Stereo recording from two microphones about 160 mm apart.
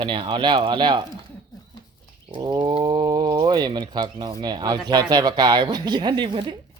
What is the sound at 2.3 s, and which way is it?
Speech, 30° right (ahead or behind).